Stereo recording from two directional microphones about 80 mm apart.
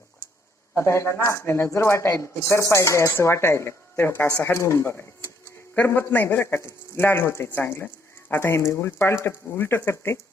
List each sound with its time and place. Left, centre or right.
0.8 s speech: left